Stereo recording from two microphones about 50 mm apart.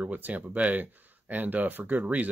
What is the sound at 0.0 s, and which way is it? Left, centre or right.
Speech, right.